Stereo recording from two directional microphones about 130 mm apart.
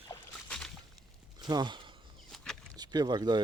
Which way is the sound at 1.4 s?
35° right (ahead or behind).